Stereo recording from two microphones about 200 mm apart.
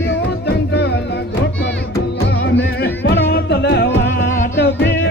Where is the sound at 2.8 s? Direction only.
55° left (ahead or behind).